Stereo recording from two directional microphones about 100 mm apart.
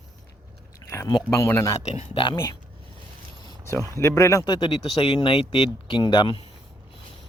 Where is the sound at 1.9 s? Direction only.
60° left (ahead or behind).